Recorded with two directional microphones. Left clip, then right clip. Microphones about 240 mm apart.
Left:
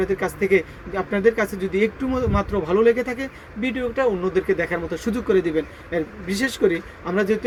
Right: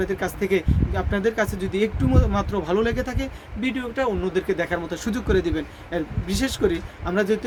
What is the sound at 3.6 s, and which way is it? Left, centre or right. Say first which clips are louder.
Speech: left 3 dB; centre.